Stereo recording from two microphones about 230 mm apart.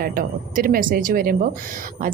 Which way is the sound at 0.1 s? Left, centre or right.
Right.